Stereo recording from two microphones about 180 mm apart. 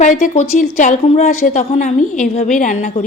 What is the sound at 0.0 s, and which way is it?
A woman's voice, 40° left (ahead or behind).